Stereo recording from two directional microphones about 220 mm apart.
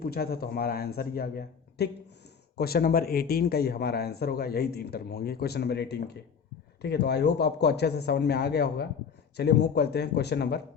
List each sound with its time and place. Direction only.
0.0 s speech: 45° left (ahead or behind)